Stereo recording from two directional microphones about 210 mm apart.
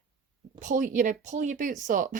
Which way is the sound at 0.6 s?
35° right (ahead or behind).